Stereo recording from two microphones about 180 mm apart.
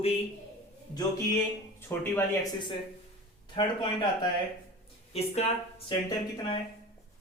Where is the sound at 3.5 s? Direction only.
25° left (ahead or behind).